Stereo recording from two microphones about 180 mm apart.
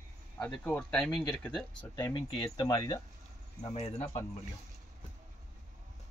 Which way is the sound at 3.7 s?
35° left (ahead or behind).